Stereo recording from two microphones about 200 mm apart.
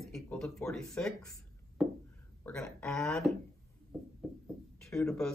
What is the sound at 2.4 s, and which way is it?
Speech, 5° left (ahead or behind).